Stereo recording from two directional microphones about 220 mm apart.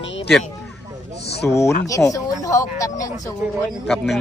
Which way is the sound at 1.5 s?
15° left (ahead or behind).